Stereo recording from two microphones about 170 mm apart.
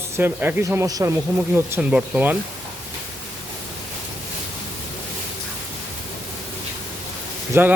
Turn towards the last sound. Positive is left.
turn(degrees=-15)  # may be behind; listen again after turning